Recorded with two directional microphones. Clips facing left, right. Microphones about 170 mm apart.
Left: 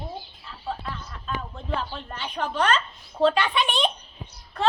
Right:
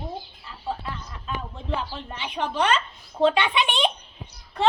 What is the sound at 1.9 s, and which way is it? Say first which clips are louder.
Speech: right 1 dB; 5° right (ahead or behind).